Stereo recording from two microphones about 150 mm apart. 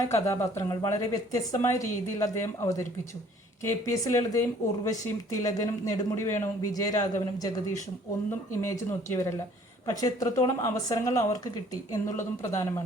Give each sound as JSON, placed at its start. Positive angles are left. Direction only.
{"t": 0.1, "sound": "a woman's voice", "side_deg": 20}